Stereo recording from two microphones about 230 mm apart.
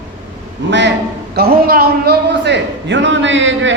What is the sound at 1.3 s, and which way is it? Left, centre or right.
A man's voice, right.